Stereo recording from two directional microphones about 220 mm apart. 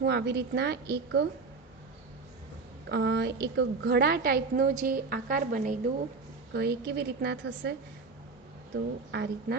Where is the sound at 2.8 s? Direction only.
50° right (ahead or behind).